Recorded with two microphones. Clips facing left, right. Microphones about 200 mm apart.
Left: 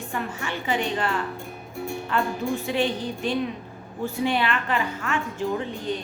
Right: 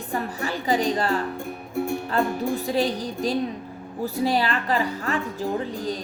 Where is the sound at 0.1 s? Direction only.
35° right (ahead or behind).